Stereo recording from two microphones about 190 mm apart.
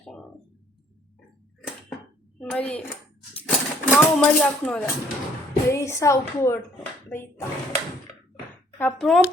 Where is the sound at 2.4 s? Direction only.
5° left (ahead or behind).